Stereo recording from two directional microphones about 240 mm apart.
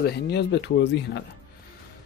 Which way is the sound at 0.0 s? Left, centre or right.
Left.